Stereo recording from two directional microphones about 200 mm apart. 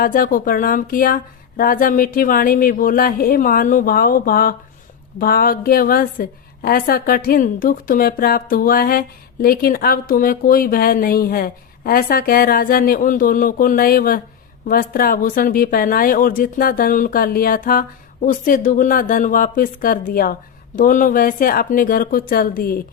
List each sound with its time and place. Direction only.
0.0 s a woman's voice: 45° left (ahead or behind)